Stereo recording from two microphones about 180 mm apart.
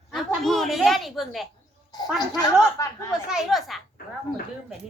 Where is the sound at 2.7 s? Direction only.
15° left (ahead or behind).